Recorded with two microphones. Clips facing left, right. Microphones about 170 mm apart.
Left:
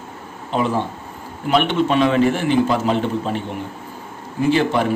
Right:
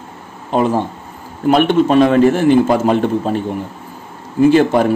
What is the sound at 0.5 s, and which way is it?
Speech, 45° right (ahead or behind).